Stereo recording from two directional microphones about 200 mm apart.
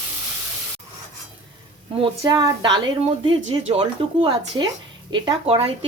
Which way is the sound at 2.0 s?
25° right (ahead or behind).